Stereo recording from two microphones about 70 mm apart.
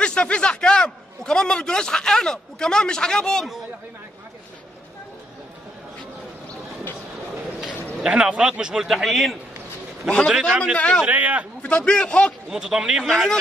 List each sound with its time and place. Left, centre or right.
0.0 s a man's voice: centre
8.0 s a man's voice: centre
10.0 s a man's voice: centre
11.1 s a man's voice: right
11.6 s a man's voice: centre
12.4 s a man's voice: centre
13.0 s a man's voice: centre